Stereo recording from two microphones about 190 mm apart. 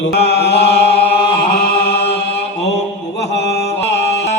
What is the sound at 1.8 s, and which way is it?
Chant, 60° left (ahead or behind).